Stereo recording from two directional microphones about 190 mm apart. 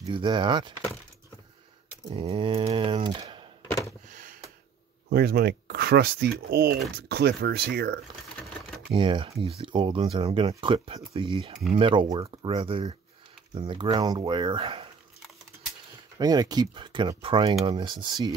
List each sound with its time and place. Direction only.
0.0 s speech: 25° right (ahead or behind)
2.0 s speech: 30° right (ahead or behind)
3.6 s a sound: 15° left (ahead or behind)
4.1 s a sound: 45° right (ahead or behind)
5.1 s speech: 55° right (ahead or behind)
8.9 s speech: 25° right (ahead or behind)
16.2 s speech: 20° right (ahead or behind)